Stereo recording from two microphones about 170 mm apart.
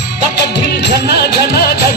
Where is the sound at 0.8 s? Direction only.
80° left.